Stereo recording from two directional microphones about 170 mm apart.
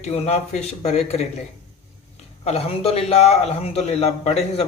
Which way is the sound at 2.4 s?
35° left (ahead or behind).